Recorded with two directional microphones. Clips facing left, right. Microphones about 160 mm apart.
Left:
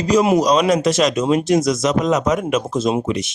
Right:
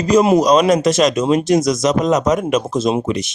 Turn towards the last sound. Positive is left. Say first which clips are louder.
# right 1 dB
turn(degrees=-40)  # may be behind; listen again after turning